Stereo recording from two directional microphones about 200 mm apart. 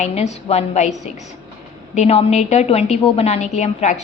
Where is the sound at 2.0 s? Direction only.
30° left (ahead or behind).